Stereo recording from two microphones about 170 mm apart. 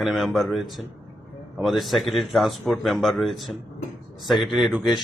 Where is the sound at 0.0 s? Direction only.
Centre (ahead or behind).